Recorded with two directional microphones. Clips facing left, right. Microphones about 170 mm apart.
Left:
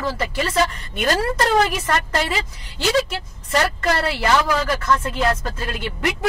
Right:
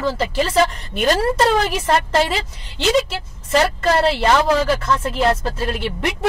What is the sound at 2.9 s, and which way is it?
Speech, 25° right (ahead or behind).